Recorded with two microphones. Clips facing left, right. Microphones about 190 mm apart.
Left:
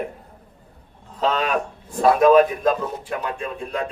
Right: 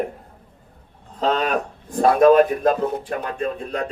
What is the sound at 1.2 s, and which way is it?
Speech, 45° right (ahead or behind).